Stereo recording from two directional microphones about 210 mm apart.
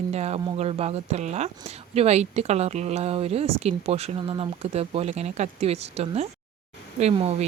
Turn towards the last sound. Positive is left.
turn(degrees=-30)  # may be behind; listen again after turning